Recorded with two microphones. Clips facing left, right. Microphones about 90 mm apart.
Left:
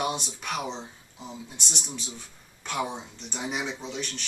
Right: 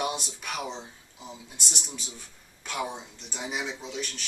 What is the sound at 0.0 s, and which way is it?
Speech, centre (ahead or behind).